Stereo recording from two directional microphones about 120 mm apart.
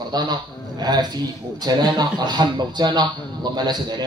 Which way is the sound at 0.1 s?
35° right (ahead or behind).